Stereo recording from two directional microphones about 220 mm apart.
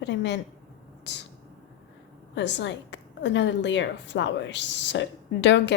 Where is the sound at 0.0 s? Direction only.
55° left (ahead or behind).